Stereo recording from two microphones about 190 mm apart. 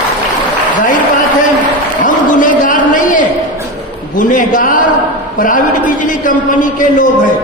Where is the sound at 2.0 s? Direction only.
45° left (ahead or behind).